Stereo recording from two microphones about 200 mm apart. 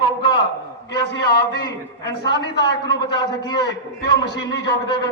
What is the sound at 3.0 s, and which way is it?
Speech, 20° left (ahead or behind).